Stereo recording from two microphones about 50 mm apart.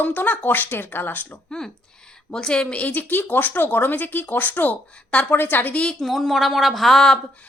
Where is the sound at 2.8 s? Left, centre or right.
Left.